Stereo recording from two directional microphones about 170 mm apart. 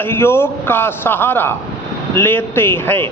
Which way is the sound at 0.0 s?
15° left (ahead or behind).